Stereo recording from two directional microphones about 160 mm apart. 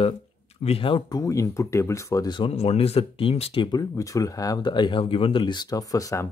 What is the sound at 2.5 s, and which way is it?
Speech, 40° left (ahead or behind).